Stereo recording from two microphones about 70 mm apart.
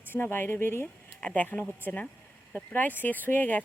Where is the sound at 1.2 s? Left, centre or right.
Centre.